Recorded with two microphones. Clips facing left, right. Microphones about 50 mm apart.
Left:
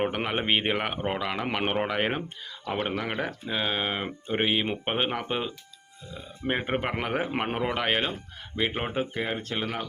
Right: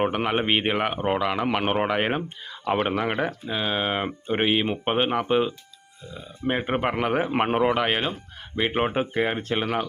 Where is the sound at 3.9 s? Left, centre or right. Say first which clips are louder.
Right 4 dB; right.